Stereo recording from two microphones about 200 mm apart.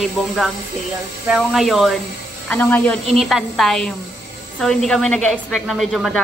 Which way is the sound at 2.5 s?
15° left (ahead or behind).